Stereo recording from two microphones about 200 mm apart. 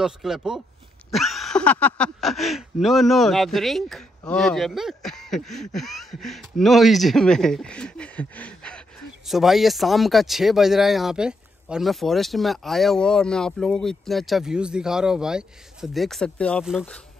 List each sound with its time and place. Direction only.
0.0 s speech: centre (ahead or behind)